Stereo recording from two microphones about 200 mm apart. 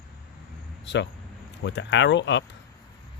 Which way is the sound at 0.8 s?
65° left (ahead or behind).